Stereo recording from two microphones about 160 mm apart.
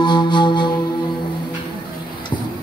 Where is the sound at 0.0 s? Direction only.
30° left (ahead or behind).